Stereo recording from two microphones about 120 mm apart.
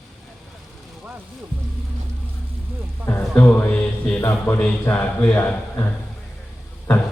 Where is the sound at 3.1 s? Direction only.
10° left (ahead or behind).